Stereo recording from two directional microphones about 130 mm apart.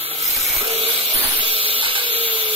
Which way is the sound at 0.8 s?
50° right (ahead or behind).